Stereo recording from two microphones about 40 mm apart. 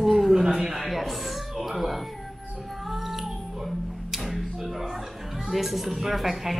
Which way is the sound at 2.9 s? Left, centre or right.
Centre.